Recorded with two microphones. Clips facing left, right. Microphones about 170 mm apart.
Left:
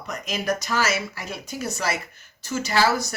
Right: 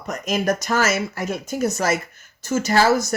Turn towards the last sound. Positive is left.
turn(degrees=-45)  # may be behind; listen again after turning